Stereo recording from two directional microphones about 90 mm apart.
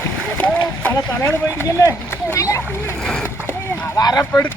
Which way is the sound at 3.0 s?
10° left (ahead or behind).